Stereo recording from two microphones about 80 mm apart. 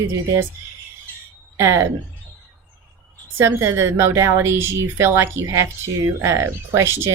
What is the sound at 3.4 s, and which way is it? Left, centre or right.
Speech, right.